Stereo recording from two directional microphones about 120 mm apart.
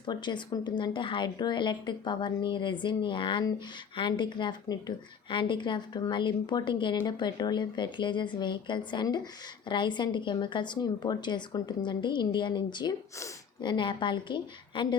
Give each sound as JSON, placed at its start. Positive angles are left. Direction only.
{"t": 0.0, "sound": "a woman's voice", "side_deg": 40}